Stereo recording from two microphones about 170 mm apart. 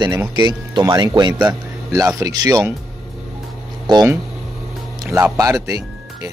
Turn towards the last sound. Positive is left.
turn(degrees=-15)  # may be behind; listen again after turning